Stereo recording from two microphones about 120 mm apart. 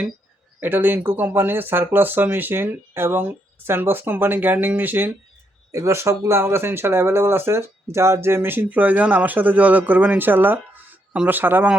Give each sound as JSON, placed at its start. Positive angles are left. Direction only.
{"t": 0.6, "sound": "speech", "side_deg": -15}